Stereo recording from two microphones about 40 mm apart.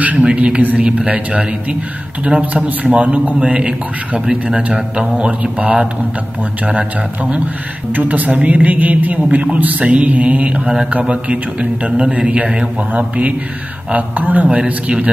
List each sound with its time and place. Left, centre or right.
0.0 s a woman's voice: right; by 4.6 s centre
7.9 s a woman's voice: right
14.5 s a man's voice: right